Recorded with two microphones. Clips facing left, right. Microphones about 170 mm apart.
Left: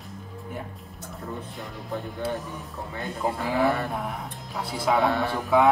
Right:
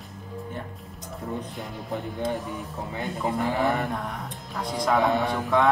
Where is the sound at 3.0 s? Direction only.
Centre (ahead or behind).